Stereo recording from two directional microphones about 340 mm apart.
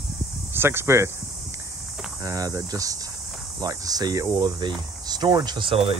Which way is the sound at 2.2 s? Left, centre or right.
Centre.